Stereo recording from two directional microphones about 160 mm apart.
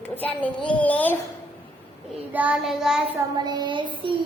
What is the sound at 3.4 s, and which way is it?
Child singing, 25° right (ahead or behind).